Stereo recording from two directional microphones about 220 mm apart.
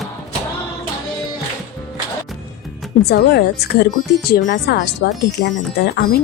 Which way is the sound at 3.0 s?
50° left (ahead or behind).